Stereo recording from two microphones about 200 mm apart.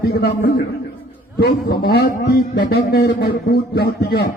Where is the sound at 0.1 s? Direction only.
55° left (ahead or behind).